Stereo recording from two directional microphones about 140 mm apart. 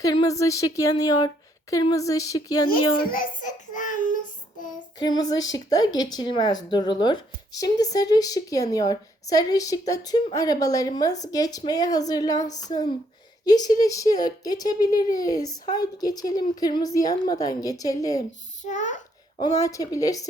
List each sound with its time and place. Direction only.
0.0 s speech: 30° left (ahead or behind)
3.1 s a child's voice: 75° left (ahead or behind)
4.9 s speech: 30° left (ahead or behind)
18.6 s a child's voice: 60° left (ahead or behind)
19.5 s speech: 25° left (ahead or behind)